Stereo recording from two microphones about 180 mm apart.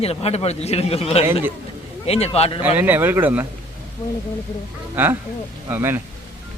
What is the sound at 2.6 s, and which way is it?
Speech, 10° right (ahead or behind).